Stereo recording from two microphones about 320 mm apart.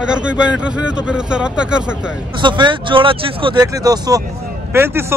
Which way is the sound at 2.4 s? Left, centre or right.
Centre.